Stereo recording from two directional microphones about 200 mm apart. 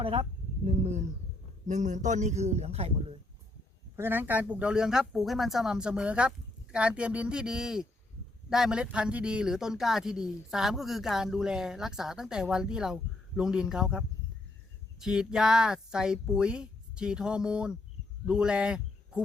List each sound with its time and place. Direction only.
0.0 s a man's voice: 25° right (ahead or behind)
3.9 s speech: 10° right (ahead or behind)